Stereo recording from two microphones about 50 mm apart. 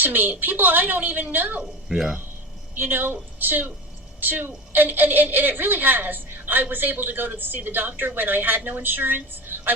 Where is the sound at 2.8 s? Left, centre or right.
Right.